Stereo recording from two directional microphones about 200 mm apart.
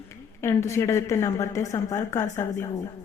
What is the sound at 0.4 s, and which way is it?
A woman's voice, 15° left (ahead or behind).